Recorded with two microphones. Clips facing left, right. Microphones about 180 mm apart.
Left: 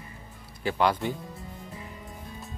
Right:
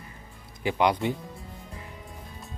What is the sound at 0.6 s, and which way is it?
Speech, 15° right (ahead or behind).